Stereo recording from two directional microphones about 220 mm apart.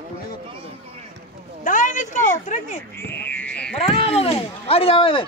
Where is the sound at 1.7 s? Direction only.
35° left (ahead or behind).